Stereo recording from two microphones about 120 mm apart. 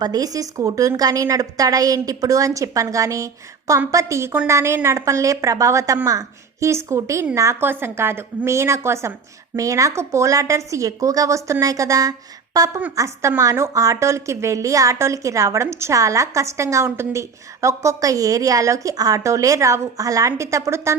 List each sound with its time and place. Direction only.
0.0 s a woman's voice: 30° right (ahead or behind)